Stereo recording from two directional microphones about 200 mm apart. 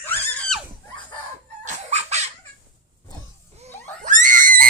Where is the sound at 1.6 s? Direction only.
35° right (ahead or behind).